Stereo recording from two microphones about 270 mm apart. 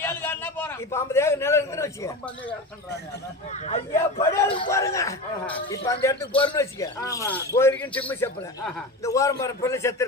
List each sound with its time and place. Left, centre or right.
0.0 s a man's voice: centre
3.5 s speech: left
4.2 s a man's voice: centre